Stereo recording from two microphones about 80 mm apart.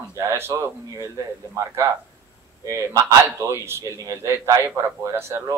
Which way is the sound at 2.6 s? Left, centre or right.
Right.